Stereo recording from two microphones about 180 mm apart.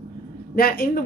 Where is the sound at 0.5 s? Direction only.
55° left (ahead or behind).